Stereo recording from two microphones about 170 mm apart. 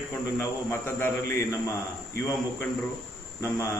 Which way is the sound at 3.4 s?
20° left (ahead or behind).